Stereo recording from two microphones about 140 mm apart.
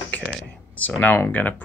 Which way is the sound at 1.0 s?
15° left (ahead or behind).